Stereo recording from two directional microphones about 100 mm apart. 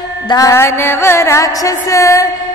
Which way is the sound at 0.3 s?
30° left (ahead or behind).